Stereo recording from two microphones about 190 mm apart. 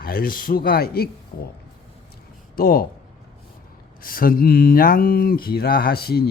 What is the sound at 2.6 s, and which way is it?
Speech, 50° left (ahead or behind).